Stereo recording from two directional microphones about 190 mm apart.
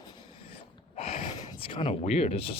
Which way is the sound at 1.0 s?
35° left (ahead or behind).